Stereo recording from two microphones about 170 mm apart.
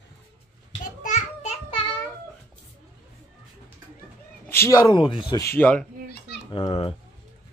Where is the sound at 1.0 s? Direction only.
45° left (ahead or behind).